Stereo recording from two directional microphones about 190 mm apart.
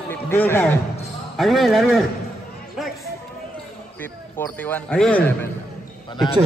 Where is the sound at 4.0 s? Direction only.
10° left (ahead or behind).